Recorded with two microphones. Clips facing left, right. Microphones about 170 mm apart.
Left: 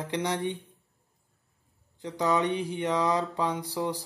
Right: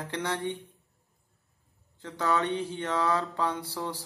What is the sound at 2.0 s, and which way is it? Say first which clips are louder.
Mantra: left 2 dB; 15° left (ahead or behind).